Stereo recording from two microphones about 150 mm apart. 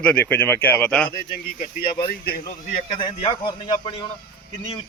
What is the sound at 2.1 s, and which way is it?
Speech, 90° left.